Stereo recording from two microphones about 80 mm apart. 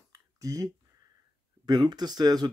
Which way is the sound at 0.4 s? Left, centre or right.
Right.